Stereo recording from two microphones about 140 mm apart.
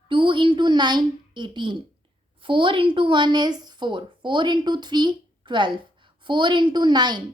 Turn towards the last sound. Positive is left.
turn(degrees=-30)  # may be behind; listen again after turning